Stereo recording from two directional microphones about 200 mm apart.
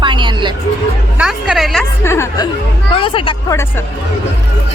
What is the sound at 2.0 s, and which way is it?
Speech, 15° left (ahead or behind).